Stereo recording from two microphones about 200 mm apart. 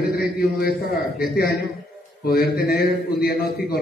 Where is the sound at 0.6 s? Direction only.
50° left (ahead or behind).